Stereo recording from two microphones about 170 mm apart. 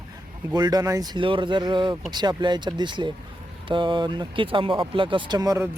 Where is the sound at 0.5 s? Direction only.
25° right (ahead or behind).